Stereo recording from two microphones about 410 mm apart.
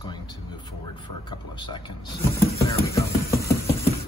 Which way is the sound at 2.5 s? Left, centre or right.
Centre.